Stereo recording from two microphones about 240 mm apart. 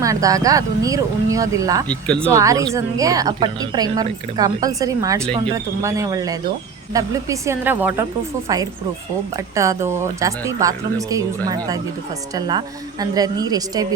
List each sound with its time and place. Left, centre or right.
0.0 s a woman's voice: centre
1.9 s speech: centre
2.3 s a woman's voice: centre
9.6 s a woman's voice: centre